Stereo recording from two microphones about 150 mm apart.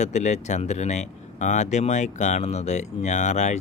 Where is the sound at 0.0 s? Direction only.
50° left (ahead or behind).